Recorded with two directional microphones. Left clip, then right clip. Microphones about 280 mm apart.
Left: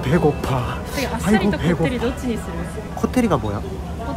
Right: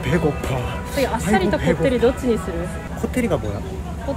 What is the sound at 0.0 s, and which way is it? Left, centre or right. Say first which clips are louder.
Speech: left 2 dB; centre.